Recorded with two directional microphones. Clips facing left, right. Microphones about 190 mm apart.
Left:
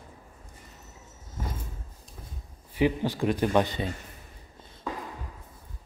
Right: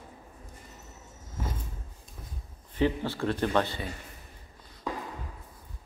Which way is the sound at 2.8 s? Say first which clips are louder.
Left 2 dB; 15° left (ahead or behind).